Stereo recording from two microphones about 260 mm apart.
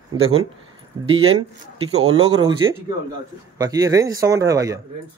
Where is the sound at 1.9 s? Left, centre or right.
Right.